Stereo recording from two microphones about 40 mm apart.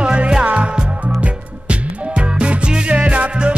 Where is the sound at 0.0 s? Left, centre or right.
Right.